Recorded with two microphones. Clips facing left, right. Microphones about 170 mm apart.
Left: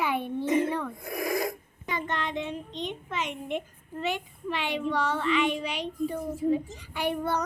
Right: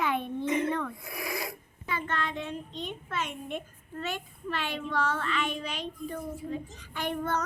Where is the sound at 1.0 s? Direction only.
45° left (ahead or behind).